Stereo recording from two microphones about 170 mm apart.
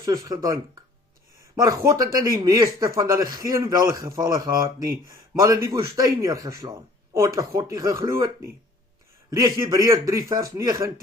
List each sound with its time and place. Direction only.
0.0 s a man's voice: 20° right (ahead or behind)
1.6 s a man's voice: 20° right (ahead or behind)
9.3 s a man's voice: 20° right (ahead or behind)